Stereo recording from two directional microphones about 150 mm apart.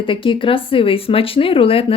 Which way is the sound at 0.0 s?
35° left (ahead or behind).